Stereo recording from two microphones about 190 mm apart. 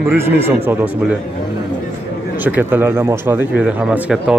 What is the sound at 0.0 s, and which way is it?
Speech, 10° right (ahead or behind).